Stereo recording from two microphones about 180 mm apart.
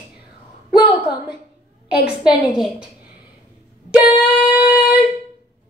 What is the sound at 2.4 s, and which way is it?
Speech, 5° right (ahead or behind).